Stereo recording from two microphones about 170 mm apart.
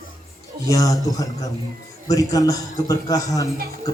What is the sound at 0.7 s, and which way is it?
A man's voice, 20° left (ahead or behind).